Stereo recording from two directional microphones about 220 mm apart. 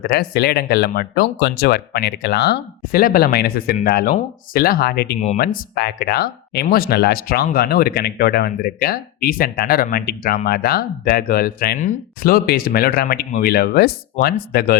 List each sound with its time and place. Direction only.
0.0 s speech: 45° left (ahead or behind)